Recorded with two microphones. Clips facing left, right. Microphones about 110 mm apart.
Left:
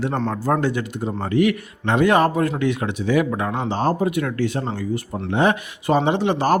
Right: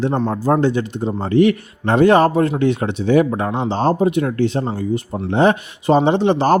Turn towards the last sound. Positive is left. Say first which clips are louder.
# right 4 dB
turn(degrees=-30)  # may be behind; listen again after turning